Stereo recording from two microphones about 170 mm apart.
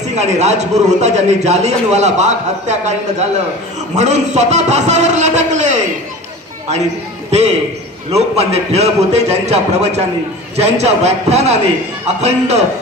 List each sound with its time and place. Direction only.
0.1 s a man's voice: 40° right (ahead or behind)
7.2 s a man's voice: 40° right (ahead or behind)